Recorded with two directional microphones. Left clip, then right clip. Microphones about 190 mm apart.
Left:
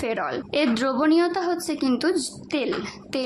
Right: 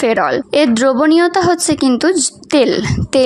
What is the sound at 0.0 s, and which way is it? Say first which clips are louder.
A woman's voice: right 13 dB; 45° right (ahead or behind).